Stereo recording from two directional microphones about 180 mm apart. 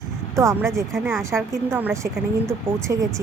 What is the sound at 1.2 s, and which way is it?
Speech, 15° right (ahead or behind).